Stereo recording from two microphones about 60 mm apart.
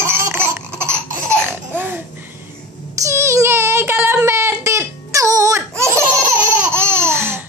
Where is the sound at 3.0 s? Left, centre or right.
Right.